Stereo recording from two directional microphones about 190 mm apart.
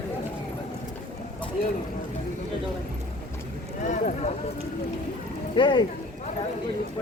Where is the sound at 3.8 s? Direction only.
40° left (ahead or behind).